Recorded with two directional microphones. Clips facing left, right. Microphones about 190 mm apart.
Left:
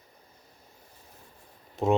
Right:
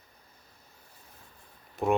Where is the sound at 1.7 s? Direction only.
20° left (ahead or behind).